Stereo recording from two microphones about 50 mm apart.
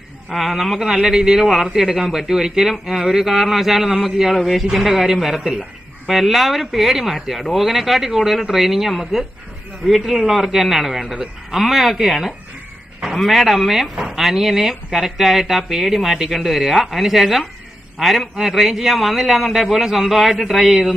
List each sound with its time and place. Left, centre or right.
0.3 s a man's voice: centre